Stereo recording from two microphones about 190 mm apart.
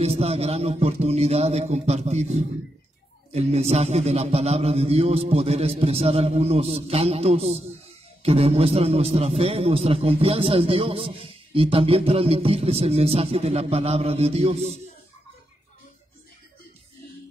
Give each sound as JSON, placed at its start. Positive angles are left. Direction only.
{"t": 0.0, "sound": "a man's voice", "side_deg": -35}